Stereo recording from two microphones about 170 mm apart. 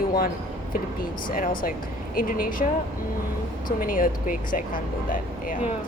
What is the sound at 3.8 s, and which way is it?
A woman's voice, 55° left (ahead or behind).